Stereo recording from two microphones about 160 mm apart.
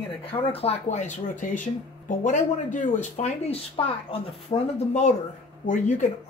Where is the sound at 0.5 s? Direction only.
40° left (ahead or behind).